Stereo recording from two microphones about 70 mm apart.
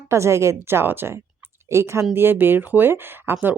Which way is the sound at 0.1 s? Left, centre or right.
Right.